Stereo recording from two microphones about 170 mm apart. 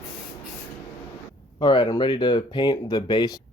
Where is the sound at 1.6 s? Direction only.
25° left (ahead or behind).